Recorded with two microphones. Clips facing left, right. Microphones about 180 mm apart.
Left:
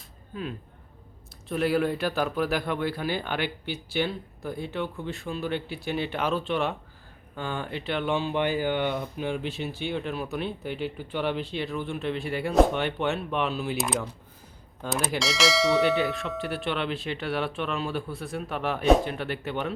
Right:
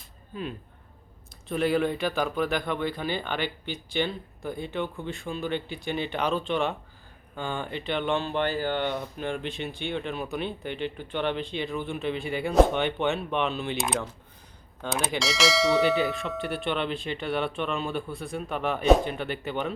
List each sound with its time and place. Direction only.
1.5 s speech: centre (ahead or behind)